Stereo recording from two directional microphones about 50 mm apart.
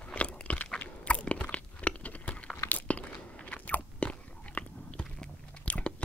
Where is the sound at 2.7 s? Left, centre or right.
Left.